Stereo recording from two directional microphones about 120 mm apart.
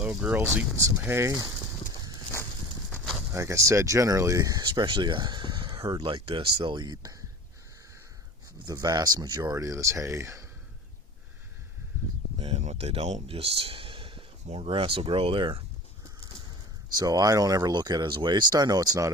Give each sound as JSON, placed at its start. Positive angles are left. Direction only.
{"t": 0.0, "sound": "speech", "side_deg": -10}
{"t": 3.2, "sound": "speech", "side_deg": -25}
{"t": 8.6, "sound": "speech", "side_deg": -35}
{"t": 12.4, "sound": "speech", "side_deg": -60}
{"t": 13.2, "sound": "speech", "side_deg": -55}
{"t": 14.4, "sound": "speech", "side_deg": -60}
{"t": 17.0, "sound": "speech", "side_deg": -30}